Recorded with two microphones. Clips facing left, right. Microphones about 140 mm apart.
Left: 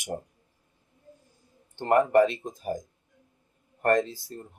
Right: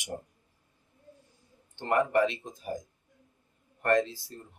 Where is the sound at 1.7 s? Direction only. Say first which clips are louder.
Left 5 dB; 45° left (ahead or behind).